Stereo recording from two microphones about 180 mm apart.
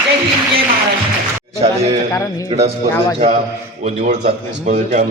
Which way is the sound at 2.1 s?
20° left (ahead or behind).